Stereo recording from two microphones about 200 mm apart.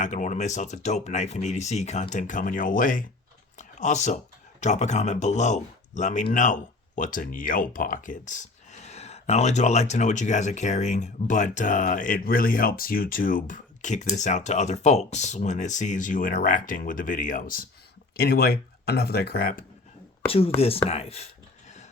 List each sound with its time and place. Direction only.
0.0 s speech: 40° left (ahead or behind)
20.2 s speech: 30° left (ahead or behind)